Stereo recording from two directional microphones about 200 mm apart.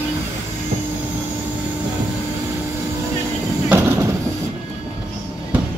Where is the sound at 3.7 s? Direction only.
15° right (ahead or behind).